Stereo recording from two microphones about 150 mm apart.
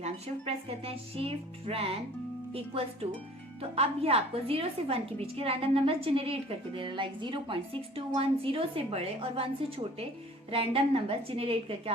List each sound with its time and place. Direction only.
0.0 s a woman's voice: 40° right (ahead or behind)